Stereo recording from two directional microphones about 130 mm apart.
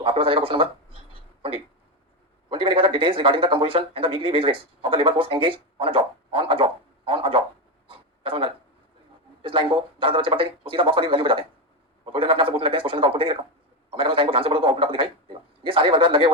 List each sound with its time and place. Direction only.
0.0 s a man's voice: 45° right (ahead or behind)
7.9 s a sound: 45° right (ahead or behind)
9.4 s a man's voice: 40° right (ahead or behind)